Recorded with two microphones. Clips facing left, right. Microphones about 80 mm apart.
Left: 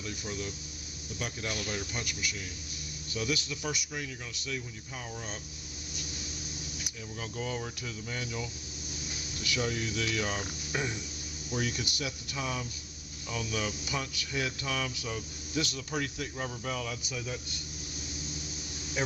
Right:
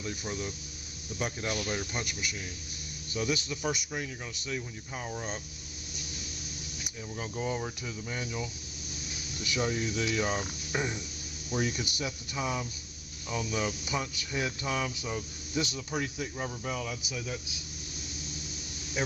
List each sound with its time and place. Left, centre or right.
0.0 s speech: right
7.2 s speech: centre
19.0 s speech: centre